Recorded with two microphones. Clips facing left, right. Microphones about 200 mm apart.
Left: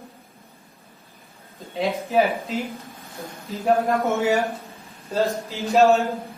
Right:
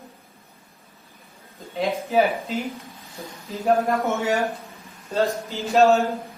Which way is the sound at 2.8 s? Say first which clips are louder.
Left 1 dB; 50° left (ahead or behind).